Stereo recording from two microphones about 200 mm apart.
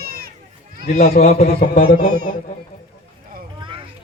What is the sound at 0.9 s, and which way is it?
Speech, 45° left (ahead or behind).